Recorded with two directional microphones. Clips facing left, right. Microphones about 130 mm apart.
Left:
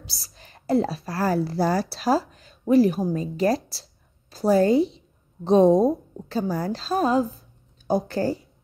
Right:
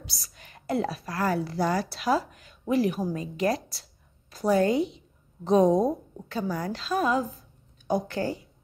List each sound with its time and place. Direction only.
0.0 s a woman's voice: 30° left (ahead or behind)